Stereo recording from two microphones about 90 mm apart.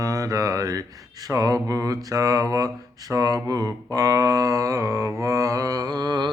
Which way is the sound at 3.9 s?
40° right (ahead or behind).